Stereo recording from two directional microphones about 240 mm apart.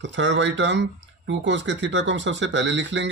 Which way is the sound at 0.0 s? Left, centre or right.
Right.